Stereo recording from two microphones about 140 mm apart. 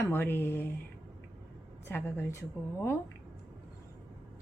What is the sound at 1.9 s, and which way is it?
Speech, 15° left (ahead or behind).